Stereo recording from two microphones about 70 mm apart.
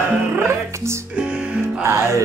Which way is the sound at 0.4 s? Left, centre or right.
Right.